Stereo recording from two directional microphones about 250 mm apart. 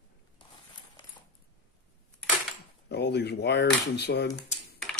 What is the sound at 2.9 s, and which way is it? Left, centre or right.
Speech, left.